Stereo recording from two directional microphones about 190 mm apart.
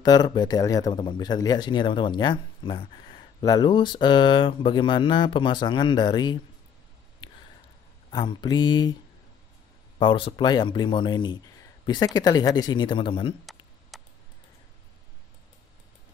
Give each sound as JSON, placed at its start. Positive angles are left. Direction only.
{"t": 0.0, "sound": "speech", "side_deg": 20}
{"t": 8.1, "sound": "speech", "side_deg": 25}
{"t": 9.9, "sound": "speech", "side_deg": 25}
{"t": 13.5, "sound": "tick", "side_deg": 0}